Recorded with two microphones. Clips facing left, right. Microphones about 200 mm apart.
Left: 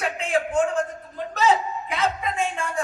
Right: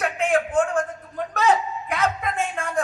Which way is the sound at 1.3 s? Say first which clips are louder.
Even; 55° right (ahead or behind).